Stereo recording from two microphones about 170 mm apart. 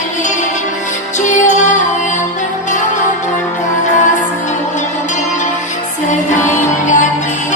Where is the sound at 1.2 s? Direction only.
45° left (ahead or behind).